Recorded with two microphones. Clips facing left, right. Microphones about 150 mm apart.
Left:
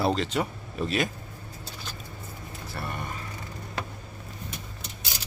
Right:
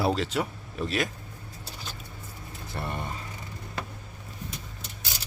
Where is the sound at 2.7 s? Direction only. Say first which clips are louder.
Right 2 dB; 25° right (ahead or behind).